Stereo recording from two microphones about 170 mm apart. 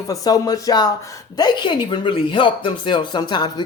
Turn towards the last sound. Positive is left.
turn(degrees=25)  # may be behind; listen again after turning